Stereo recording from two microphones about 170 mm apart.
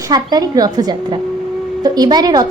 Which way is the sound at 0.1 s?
25° right (ahead or behind).